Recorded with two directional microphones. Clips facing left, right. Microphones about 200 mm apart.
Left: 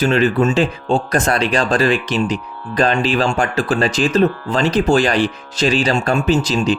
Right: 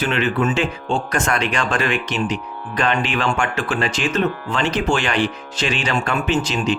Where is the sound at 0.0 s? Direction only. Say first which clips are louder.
Left 5 dB; 40° left (ahead or behind).